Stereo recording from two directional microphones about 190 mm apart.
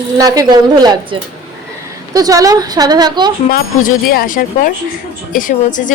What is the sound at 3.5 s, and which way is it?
A woman's voice, 50° left (ahead or behind).